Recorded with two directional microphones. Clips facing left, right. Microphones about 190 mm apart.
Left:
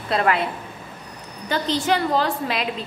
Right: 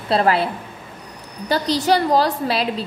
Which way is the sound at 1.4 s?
40° right (ahead or behind).